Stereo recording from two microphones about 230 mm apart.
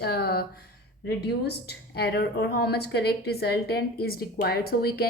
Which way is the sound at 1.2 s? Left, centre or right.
Left.